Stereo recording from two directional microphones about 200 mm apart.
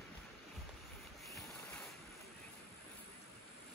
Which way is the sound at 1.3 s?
5° left (ahead or behind).